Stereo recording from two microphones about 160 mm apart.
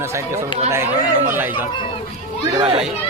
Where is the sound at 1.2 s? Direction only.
10° right (ahead or behind).